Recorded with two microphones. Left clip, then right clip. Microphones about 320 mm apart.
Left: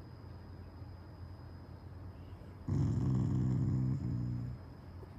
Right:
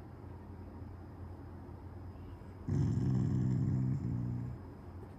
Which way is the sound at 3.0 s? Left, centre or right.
Centre.